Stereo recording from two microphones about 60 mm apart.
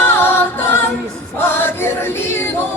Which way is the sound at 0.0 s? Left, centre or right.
Left.